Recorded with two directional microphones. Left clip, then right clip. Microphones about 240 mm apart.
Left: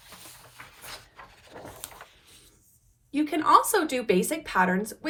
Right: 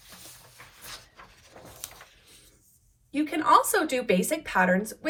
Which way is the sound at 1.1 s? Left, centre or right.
Left.